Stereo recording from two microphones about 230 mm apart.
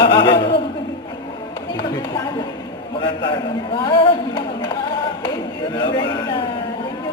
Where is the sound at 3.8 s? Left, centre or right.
Left.